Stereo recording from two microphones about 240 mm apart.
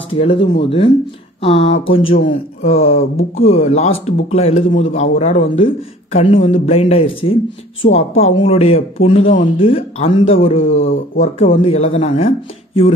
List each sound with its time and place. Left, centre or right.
0.2 s a man's voice: left